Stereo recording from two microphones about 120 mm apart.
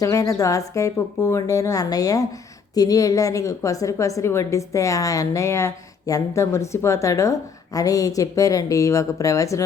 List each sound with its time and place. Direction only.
0.0 s a woman's voice: 30° left (ahead or behind)